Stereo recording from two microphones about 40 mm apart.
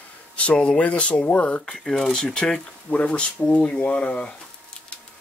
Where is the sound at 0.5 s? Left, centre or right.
Left.